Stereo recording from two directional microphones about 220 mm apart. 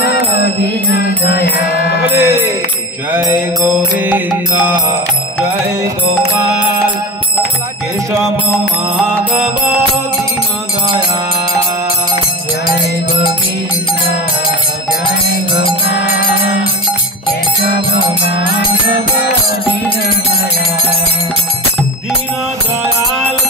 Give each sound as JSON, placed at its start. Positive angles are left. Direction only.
{"t": 0.9, "sound": "music", "side_deg": 45}
{"t": 2.0, "sound": "music", "side_deg": -10}
{"t": 15.6, "sound": "music", "side_deg": 50}